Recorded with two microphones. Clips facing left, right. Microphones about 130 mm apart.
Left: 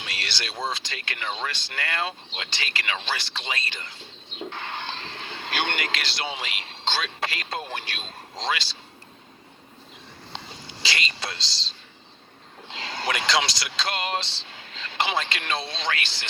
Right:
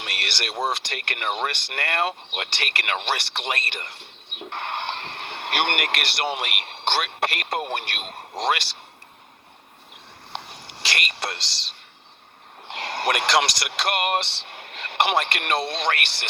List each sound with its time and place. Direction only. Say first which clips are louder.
0.0 s speech: right 3 dB; 65° right (ahead or behind)
10.3 s whispering: right 3 dB; 65° right (ahead or behind)
12.6 s speech: right 4 dB; 65° right (ahead or behind)